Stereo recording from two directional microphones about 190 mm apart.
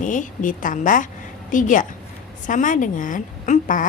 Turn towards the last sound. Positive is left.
turn(degrees=45)  # may be behind; listen again after turning